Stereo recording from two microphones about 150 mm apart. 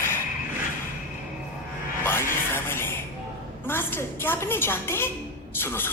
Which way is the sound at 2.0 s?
15° left (ahead or behind).